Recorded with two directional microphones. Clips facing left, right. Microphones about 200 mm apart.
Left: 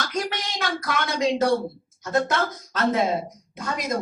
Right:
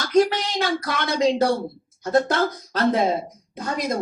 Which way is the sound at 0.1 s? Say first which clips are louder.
Right 10 dB; 30° right (ahead or behind).